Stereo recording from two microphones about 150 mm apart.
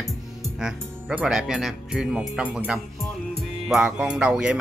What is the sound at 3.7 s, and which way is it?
Speech, 5° right (ahead or behind).